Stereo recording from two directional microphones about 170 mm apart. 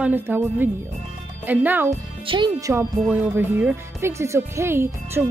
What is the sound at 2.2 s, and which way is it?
Speech, 30° right (ahead or behind).